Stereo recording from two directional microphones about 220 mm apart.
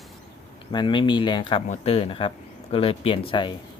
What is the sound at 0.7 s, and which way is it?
Speech, 20° left (ahead or behind).